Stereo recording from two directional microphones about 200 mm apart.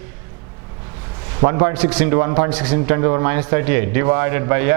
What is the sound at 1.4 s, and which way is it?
A man's voice, 15° right (ahead or behind).